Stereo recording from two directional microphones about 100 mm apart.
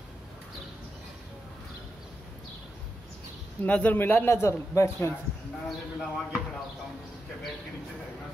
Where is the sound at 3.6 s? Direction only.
15° left (ahead or behind).